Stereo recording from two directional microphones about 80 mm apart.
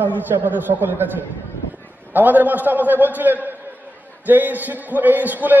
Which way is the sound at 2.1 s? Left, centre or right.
Right.